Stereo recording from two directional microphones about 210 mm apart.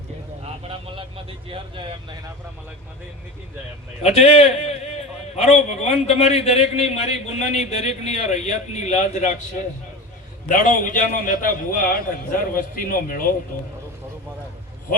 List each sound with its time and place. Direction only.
0.6 s vehicle: 25° right (ahead or behind)
4.0 s a man's voice: 30° left (ahead or behind)